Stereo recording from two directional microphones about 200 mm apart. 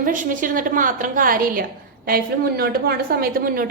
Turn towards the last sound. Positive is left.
turn(degrees=-45)  # may be behind; listen again after turning